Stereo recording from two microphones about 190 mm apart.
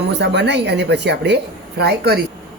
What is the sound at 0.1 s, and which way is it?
A woman's voice, 65° right (ahead or behind).